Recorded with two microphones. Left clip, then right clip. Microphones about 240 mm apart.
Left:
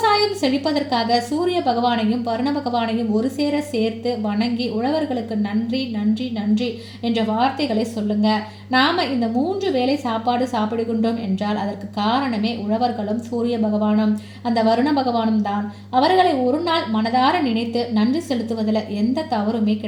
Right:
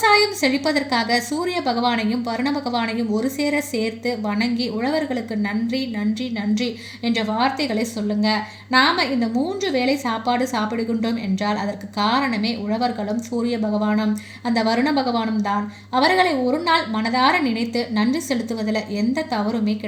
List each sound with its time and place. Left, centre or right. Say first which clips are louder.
0.0 s a woman's voice: right 1 dB; right
7.1 s a woman's voice: left 1 dB; right